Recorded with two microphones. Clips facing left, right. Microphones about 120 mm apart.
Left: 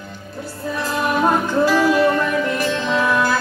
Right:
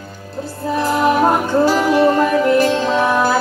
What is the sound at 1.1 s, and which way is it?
Music, 30° right (ahead or behind).